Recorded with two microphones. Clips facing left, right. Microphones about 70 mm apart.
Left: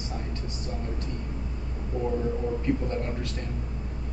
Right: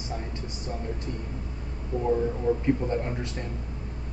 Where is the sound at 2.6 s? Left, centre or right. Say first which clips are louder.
Right 2 dB; right.